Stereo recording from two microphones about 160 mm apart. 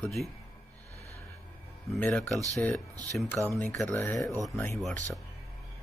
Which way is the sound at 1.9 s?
5° left (ahead or behind).